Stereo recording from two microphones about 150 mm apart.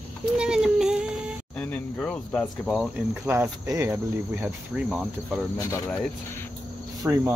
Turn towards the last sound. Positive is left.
turn(degrees=-15)  # may be behind; listen again after turning